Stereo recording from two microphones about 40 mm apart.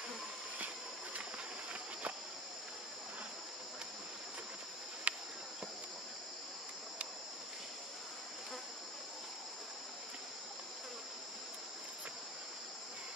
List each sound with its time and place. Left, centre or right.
5.1 s cricket: right